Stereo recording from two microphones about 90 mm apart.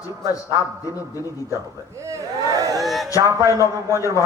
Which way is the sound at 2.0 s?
35° right (ahead or behind).